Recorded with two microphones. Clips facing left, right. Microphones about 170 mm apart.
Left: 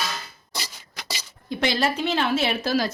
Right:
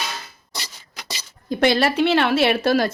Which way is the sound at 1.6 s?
65° right (ahead or behind).